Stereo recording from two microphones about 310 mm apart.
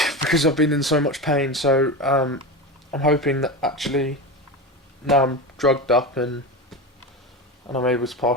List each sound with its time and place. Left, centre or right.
0.0 s speech: centre
7.9 s speech: centre